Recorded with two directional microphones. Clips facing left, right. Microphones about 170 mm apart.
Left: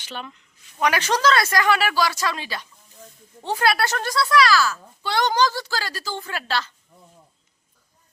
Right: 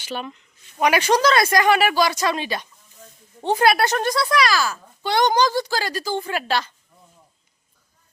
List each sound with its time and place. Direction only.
0.0 s a child's voice: 15° right (ahead or behind)